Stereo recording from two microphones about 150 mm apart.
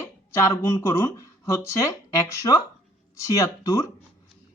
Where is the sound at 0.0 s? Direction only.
20° left (ahead or behind).